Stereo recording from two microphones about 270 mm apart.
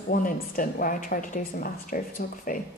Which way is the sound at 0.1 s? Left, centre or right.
Left.